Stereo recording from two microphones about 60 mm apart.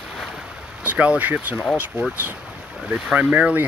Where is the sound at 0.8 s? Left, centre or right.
Right.